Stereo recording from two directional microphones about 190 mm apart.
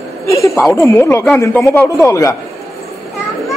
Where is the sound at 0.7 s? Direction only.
15° left (ahead or behind).